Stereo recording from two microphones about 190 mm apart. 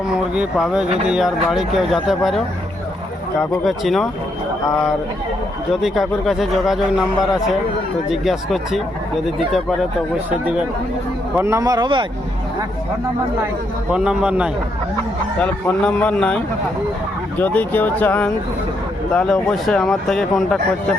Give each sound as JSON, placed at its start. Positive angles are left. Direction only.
{"t": 0.1, "sound": "speech", "side_deg": -5}
{"t": 3.6, "sound": "speech", "side_deg": 0}
{"t": 5.8, "sound": "speech", "side_deg": 0}
{"t": 10.2, "sound": "speech", "side_deg": -5}
{"t": 13.9, "sound": "speech", "side_deg": -5}
{"t": 15.4, "sound": "speech", "side_deg": 5}
{"t": 17.4, "sound": "speech", "side_deg": 10}